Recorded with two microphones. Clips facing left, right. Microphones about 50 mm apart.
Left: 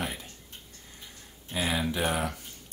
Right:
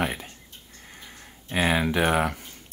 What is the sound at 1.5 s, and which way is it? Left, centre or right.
Speech, right.